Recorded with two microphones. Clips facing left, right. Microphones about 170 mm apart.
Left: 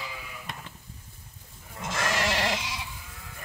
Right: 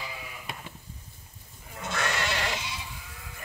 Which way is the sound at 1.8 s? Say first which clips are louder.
Left 2 dB; 90° left.